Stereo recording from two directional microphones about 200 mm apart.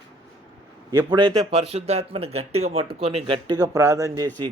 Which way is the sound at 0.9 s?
20° right (ahead or behind).